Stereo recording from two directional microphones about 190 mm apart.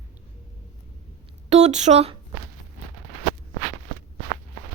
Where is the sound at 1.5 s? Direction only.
35° right (ahead or behind).